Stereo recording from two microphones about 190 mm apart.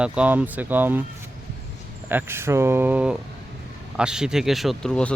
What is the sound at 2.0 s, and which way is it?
Speech, 10° right (ahead or behind).